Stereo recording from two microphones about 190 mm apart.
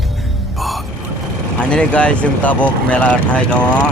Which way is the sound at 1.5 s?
5° left (ahead or behind).